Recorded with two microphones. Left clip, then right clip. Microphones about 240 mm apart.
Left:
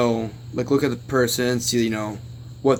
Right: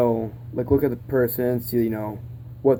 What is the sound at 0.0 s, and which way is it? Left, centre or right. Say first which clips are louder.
Speech: even; left.